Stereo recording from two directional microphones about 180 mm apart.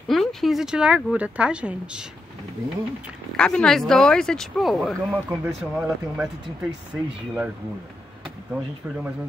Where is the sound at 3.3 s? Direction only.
5° left (ahead or behind).